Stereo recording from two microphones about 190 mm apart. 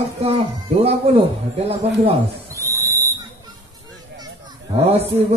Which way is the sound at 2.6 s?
15° right (ahead or behind).